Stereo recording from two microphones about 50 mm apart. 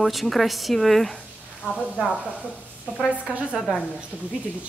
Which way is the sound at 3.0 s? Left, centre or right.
Right.